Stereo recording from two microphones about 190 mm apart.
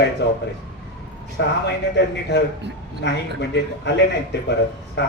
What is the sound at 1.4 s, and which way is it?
Speech, 65° left (ahead or behind).